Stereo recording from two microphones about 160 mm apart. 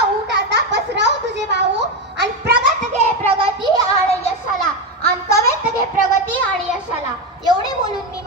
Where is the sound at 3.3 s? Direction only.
35° right (ahead or behind).